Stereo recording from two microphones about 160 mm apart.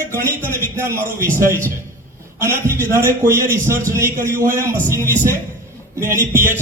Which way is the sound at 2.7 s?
15° right (ahead or behind).